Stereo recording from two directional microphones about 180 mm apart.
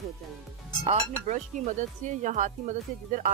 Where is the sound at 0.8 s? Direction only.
40° right (ahead or behind).